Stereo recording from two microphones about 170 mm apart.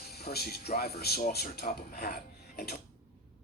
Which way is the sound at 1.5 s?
60° left (ahead or behind).